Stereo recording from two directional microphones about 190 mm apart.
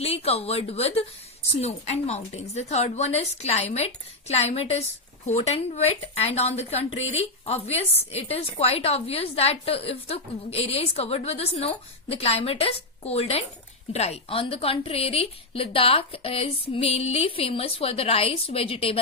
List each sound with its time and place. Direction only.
0.0 s a woman's voice: 30° left (ahead or behind)